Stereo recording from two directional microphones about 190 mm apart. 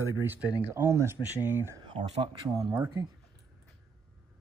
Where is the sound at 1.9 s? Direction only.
25° right (ahead or behind).